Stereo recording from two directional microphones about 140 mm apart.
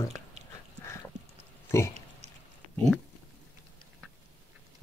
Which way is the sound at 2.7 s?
5° left (ahead or behind).